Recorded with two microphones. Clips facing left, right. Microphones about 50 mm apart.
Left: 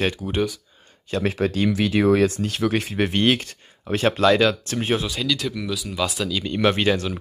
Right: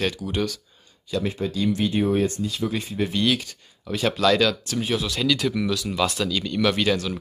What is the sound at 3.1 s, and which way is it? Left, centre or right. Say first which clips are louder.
Speech: left 2 dB; left.